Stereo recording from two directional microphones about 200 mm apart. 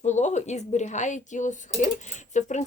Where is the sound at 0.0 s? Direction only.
35° left (ahead or behind).